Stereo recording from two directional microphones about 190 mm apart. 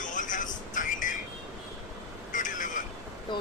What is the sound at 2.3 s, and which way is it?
Vehicle, 45° left (ahead or behind).